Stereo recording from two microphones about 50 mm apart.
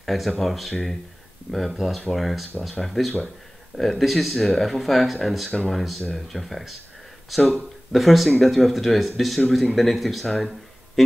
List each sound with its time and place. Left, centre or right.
0.0 s speech: centre